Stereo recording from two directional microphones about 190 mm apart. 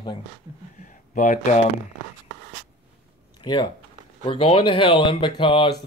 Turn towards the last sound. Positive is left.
turn(degrees=25)  # may be behind; listen again after turning